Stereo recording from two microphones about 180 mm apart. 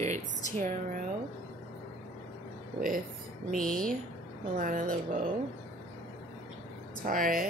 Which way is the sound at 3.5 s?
5° left (ahead or behind).